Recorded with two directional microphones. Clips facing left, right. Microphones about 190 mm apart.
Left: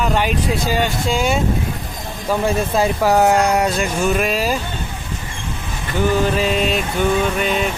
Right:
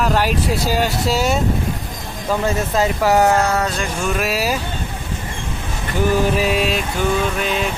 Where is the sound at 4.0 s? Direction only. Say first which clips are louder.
Left 2 dB; centre (ahead or behind).